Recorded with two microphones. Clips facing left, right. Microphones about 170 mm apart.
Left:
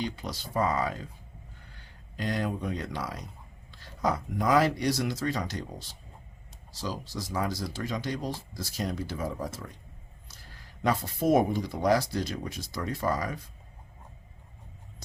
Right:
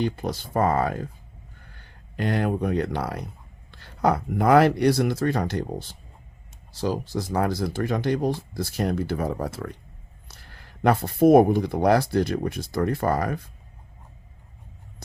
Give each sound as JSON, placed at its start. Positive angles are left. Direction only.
{"t": 0.0, "sound": "speech", "side_deg": -55}